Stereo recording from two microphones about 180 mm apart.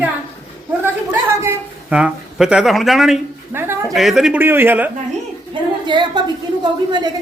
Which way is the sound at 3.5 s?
10° right (ahead or behind).